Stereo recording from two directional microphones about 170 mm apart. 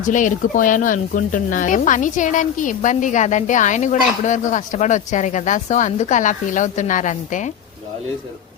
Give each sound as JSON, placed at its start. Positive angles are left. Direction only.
{"t": 0.0, "sound": "speech", "side_deg": 50}